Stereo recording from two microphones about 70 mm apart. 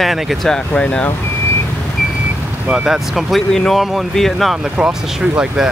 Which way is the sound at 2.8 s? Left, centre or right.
Centre.